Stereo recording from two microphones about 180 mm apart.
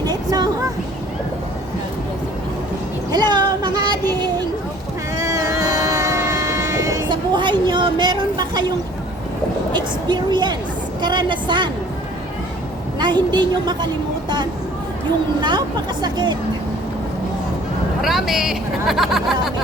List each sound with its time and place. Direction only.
0.0 s vehicle: 20° right (ahead or behind)
3.1 s a sound: 25° right (ahead or behind)
5.1 s vehicle: 20° right (ahead or behind)
9.7 s a woman's voice: 25° right (ahead or behind)
13.0 s a woman's voice: 25° right (ahead or behind)
18.0 s speech: centre (ahead or behind)